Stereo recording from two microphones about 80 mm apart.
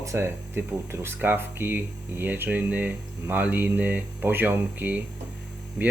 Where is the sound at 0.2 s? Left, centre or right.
Right.